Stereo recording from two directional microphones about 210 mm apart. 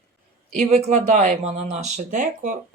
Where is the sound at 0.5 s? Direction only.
30° right (ahead or behind).